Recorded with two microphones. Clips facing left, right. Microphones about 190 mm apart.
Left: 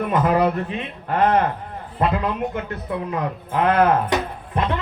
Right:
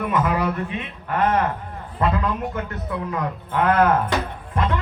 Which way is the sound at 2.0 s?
25° left (ahead or behind).